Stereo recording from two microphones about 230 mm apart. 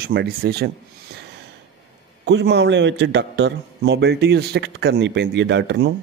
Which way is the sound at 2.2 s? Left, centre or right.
Right.